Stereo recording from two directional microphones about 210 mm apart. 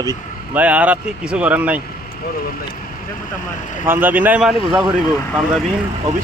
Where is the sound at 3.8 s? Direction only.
10° right (ahead or behind).